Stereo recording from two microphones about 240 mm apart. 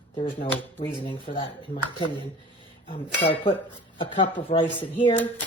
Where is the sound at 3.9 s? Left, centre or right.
Left.